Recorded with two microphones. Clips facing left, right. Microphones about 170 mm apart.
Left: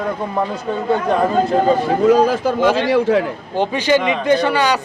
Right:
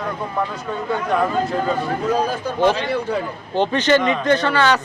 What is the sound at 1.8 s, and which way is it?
A man's voice, 90° left.